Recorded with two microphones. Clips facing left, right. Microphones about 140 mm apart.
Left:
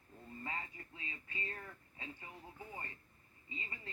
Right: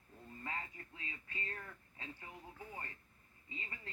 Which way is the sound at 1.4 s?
10° left (ahead or behind).